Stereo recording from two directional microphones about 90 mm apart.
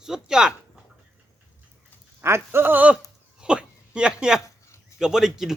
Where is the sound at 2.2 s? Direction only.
25° right (ahead or behind).